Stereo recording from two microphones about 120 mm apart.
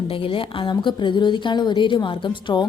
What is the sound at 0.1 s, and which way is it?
A woman's voice, 50° left (ahead or behind).